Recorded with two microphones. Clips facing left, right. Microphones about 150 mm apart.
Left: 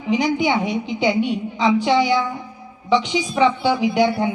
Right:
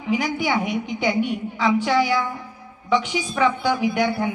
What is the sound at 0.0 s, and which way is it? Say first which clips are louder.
A woman's voice: left 4 dB; 25° left (ahead or behind).